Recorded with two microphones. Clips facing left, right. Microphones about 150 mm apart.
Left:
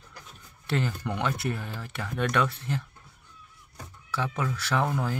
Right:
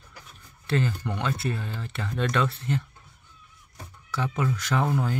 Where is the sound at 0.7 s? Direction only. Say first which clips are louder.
Right 2 dB; 15° left (ahead or behind).